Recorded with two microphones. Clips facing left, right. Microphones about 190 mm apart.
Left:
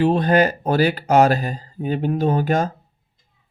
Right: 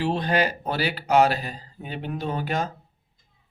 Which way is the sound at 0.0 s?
50° left (ahead or behind).